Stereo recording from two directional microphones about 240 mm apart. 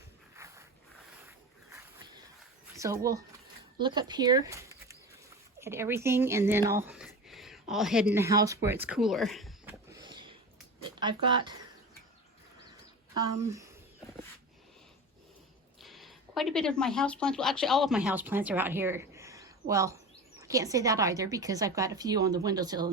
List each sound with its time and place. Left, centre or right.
0.3 s a sound: centre
2.7 s a woman's voice: centre
9.9 s a sound: centre
11.0 s speech: centre
13.1 s speech: centre
15.8 s a woman's voice: centre